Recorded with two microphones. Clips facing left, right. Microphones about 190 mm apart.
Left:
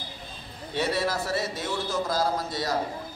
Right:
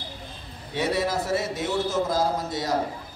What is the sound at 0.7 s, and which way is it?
A man's voice, 20° right (ahead or behind).